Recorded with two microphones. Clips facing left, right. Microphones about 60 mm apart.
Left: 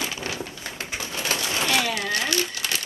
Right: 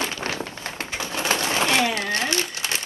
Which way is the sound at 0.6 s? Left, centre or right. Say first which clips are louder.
Right 2 dB; right.